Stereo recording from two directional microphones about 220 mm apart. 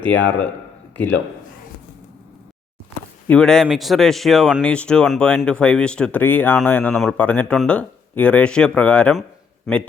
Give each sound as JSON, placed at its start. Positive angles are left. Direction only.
{"t": 0.0, "sound": "a man's voice", "side_deg": 55}
{"t": 3.2, "sound": "a man's voice", "side_deg": 5}